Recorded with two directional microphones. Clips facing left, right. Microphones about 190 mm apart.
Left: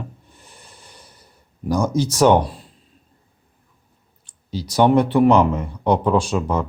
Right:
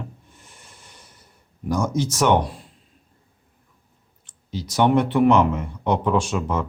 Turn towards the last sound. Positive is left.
turn(degrees=35)  # may be behind; listen again after turning